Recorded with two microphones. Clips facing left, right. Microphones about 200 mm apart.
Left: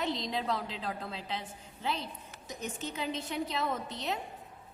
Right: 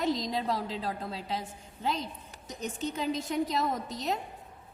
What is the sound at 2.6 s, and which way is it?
A woman's voice, 35° right (ahead or behind).